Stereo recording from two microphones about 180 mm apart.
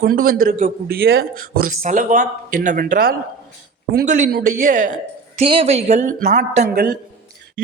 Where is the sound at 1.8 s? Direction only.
45° right (ahead or behind).